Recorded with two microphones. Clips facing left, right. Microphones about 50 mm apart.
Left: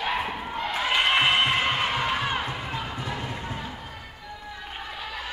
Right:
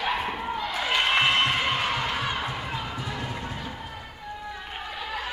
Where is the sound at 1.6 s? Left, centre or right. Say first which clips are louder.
Left 1 dB; left.